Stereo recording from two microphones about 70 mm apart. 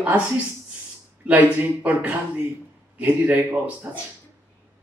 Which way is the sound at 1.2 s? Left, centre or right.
Right.